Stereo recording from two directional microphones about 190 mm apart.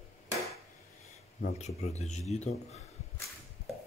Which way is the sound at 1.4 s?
40° left (ahead or behind).